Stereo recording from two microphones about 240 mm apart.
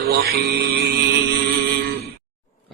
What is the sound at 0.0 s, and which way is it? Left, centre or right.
Mantra, right.